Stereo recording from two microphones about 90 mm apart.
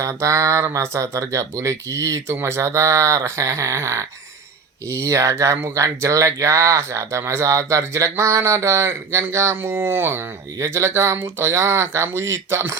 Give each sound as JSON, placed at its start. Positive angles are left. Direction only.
{"t": 0.0, "sound": "speech", "side_deg": -35}